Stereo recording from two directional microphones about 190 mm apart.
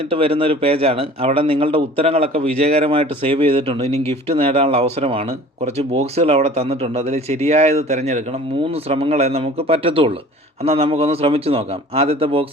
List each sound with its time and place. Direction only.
0.1 s speech: 30° right (ahead or behind)
3.9 s speech: 15° left (ahead or behind)
4.4 s speech: 30° right (ahead or behind)